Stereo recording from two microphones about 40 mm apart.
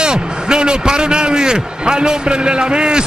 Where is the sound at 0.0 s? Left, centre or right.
Right.